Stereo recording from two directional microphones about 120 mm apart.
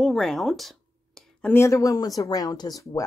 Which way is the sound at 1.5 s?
25° left (ahead or behind).